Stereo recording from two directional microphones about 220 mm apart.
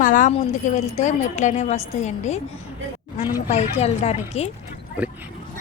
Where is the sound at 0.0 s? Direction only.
35° left (ahead or behind).